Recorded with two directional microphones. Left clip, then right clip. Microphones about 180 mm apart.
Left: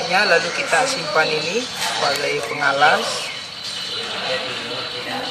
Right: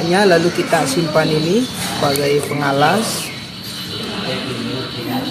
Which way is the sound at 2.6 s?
30° right (ahead or behind).